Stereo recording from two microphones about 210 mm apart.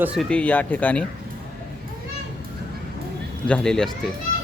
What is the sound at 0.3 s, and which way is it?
Speech, 5° left (ahead or behind).